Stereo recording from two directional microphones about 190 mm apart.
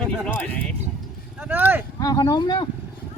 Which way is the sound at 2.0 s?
20° left (ahead or behind).